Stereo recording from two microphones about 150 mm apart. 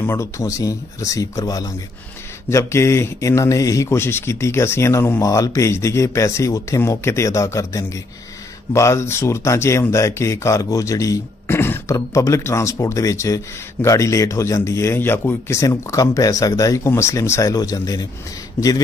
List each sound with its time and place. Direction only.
0.0 s speech: 20° left (ahead or behind)